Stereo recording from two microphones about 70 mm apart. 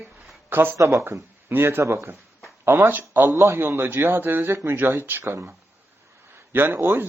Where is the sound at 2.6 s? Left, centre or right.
Right.